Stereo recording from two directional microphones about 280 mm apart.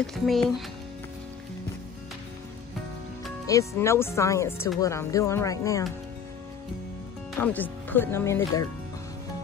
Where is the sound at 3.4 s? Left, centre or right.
Centre.